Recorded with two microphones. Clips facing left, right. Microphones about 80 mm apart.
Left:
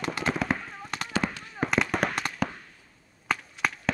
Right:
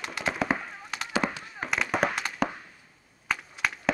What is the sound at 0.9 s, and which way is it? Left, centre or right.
Firecracker, centre.